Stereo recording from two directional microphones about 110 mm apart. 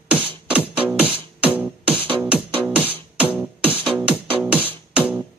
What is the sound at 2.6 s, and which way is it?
Music, 10° right (ahead or behind).